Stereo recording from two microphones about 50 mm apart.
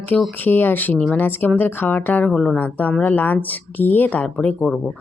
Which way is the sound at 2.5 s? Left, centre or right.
Left.